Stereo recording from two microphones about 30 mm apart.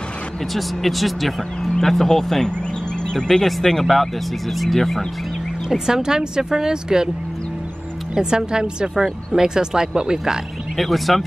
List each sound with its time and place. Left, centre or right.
0.6 s speech: centre
3.6 s speech: centre
5.7 s speech: centre
8.1 s speech: right
10.8 s speech: centre